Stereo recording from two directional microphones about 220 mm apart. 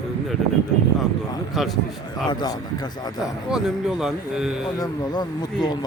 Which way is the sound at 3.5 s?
Centre (ahead or behind).